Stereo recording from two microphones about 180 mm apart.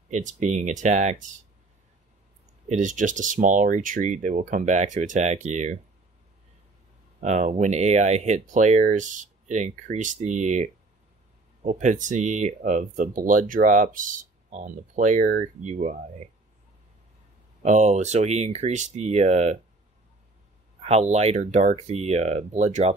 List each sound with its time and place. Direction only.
0.1 s speech: 45° right (ahead or behind)
2.7 s speech: 45° right (ahead or behind)
7.2 s speech: 40° right (ahead or behind)
17.6 s speech: 40° right (ahead or behind)
20.8 s speech: 35° right (ahead or behind)